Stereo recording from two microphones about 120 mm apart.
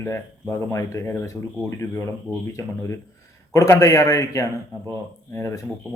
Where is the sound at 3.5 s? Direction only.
25° left (ahead or behind).